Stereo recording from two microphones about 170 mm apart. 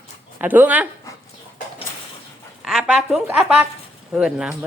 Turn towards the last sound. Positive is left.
turn(degrees=-5)  # may be behind; listen again after turning